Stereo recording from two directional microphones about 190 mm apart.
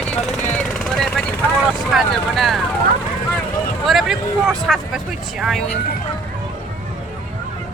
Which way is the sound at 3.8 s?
Centre (ahead or behind).